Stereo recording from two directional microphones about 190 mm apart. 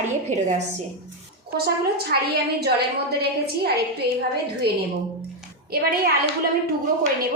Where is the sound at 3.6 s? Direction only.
55° right (ahead or behind).